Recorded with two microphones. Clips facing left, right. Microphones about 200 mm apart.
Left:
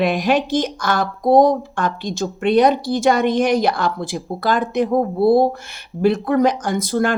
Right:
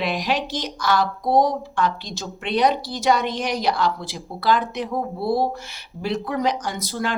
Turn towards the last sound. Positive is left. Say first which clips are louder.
# left 8 dB
turn(degrees=50)  # may be behind; listen again after turning